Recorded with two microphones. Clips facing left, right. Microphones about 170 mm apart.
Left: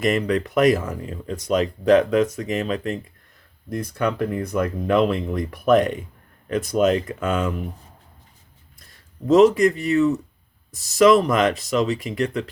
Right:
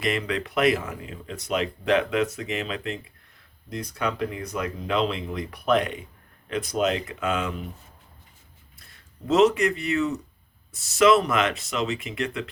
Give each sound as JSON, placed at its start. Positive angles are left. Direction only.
{"t": 0.0, "sound": "speech", "side_deg": 45}
{"t": 9.2, "sound": "speech", "side_deg": 40}